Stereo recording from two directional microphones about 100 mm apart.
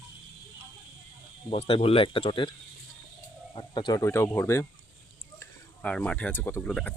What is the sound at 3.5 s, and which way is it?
Speech, 50° left (ahead or behind).